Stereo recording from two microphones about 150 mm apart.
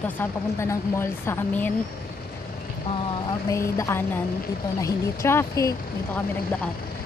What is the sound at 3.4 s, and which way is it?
Speech, 20° left (ahead or behind).